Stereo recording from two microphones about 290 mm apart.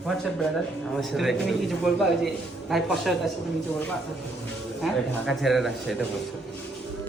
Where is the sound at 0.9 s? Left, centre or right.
Centre.